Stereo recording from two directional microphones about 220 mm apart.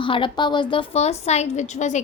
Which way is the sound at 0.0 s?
25° left (ahead or behind).